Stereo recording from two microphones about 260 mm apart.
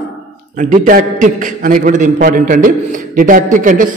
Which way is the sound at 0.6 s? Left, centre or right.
Right.